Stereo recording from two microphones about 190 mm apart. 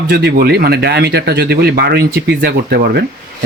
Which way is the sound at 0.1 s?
55° right (ahead or behind).